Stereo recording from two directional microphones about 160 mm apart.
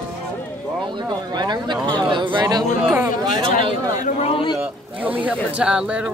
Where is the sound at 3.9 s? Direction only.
55° left (ahead or behind).